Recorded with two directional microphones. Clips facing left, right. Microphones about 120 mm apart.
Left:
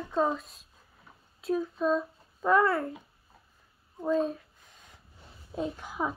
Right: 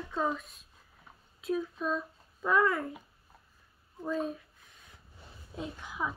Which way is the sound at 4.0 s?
30° left (ahead or behind).